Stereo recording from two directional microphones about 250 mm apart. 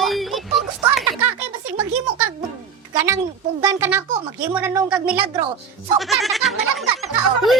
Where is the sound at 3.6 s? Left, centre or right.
Centre.